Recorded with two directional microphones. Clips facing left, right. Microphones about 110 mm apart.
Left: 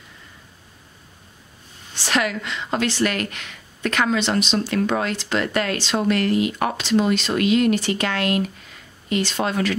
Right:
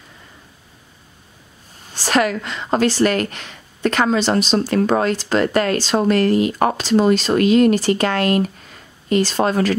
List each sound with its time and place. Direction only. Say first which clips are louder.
2.0 s a woman's voice: right 5 dB; 40° right (ahead or behind)